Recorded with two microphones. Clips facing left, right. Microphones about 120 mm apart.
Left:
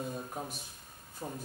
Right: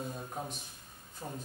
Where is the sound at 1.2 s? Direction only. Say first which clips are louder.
Left 2 dB; 30° left (ahead or behind).